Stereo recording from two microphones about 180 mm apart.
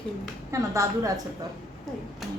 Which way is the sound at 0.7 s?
15° right (ahead or behind).